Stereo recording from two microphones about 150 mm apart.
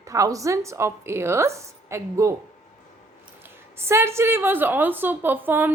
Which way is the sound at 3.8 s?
15° right (ahead or behind).